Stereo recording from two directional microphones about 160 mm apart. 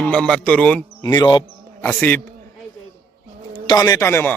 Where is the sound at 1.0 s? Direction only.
25° left (ahead or behind).